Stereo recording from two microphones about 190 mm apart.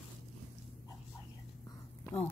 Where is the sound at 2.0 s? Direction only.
10° left (ahead or behind).